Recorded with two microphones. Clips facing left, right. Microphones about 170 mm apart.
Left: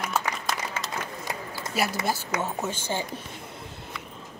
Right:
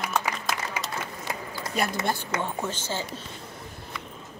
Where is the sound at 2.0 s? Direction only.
5° left (ahead or behind).